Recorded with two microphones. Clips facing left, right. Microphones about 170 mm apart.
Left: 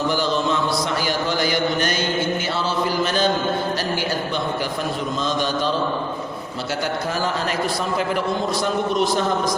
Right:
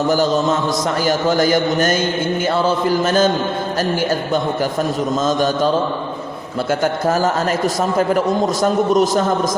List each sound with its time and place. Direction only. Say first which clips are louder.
0.1 s speech: right 5 dB; 45° right (ahead or behind)
5.2 s speech: right 6 dB; 45° right (ahead or behind)
6.8 s speech: right 7 dB; 45° right (ahead or behind)